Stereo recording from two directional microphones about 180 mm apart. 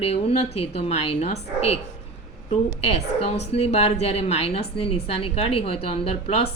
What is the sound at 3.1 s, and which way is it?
A woman's voice, 35° left (ahead or behind).